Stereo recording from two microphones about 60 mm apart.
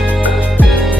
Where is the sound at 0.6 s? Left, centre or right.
Left.